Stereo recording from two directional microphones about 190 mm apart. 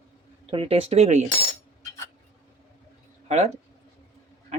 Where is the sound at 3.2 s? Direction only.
35° right (ahead or behind).